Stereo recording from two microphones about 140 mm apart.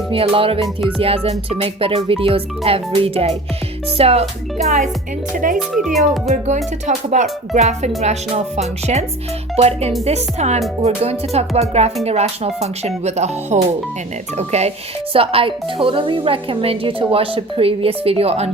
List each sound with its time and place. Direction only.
0.1 s a woman's voice: 40° right (ahead or behind)
0.9 s music: 45° right (ahead or behind)
5.3 s speech: 75° right (ahead or behind)
5.5 s speech: 5° right (ahead or behind)
6.0 s speech: 55° right (ahead or behind)
6.8 s music: 60° right (ahead or behind)
15.1 s a woman's voice: 40° right (ahead or behind)